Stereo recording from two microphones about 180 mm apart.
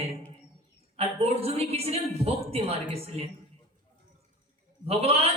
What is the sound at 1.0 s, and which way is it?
Speech, 35° right (ahead or behind).